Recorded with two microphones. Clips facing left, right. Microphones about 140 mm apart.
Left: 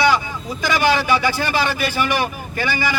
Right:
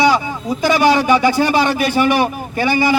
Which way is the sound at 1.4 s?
45° right (ahead or behind).